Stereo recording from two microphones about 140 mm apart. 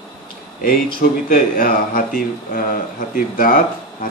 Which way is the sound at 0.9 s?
85° left.